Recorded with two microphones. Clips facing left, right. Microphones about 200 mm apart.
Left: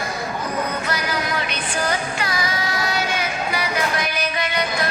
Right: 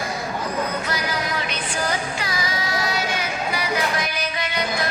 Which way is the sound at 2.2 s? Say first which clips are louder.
Left 2 dB; 60° left (ahead or behind).